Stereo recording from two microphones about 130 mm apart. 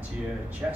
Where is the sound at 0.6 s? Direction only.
10° right (ahead or behind).